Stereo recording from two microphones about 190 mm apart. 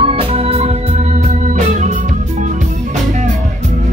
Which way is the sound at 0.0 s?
30° right (ahead or behind).